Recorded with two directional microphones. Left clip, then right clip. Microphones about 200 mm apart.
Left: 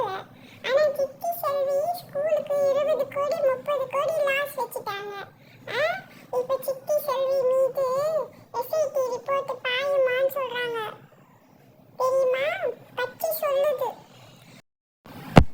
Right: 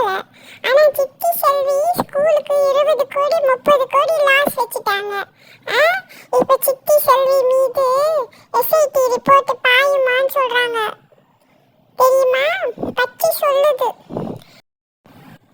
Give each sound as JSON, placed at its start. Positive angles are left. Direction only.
{"t": 0.0, "sound": "child singing", "side_deg": -45}
{"t": 3.6, "sound": "a child's voice", "side_deg": -45}
{"t": 7.0, "sound": "child singing", "side_deg": -50}
{"t": 8.5, "sound": "a child's voice", "side_deg": -50}
{"t": 10.0, "sound": "a child's voice", "side_deg": -40}
{"t": 11.9, "sound": "a child's voice", "side_deg": -50}